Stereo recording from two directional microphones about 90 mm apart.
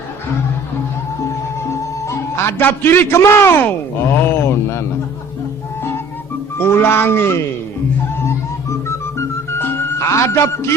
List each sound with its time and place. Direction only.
1.7 s a man's voice: 30° left (ahead or behind)
6.6 s speech: 25° left (ahead or behind)
8.2 s music: 30° left (ahead or behind)